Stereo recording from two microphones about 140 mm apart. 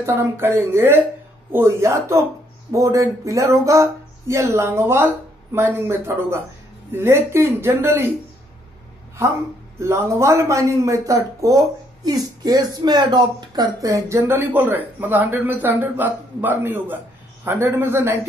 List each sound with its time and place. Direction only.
0.0 s a man's voice: 15° right (ahead or behind)
9.8 s a man's voice: 20° right (ahead or behind)